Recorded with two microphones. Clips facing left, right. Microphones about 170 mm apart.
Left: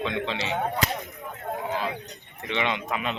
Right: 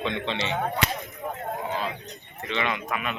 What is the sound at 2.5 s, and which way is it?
Speech, 20° left (ahead or behind).